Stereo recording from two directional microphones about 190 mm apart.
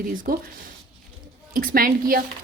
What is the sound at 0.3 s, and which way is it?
Speech, 50° right (ahead or behind).